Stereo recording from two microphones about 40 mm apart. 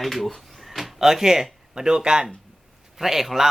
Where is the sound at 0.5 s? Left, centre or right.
Centre.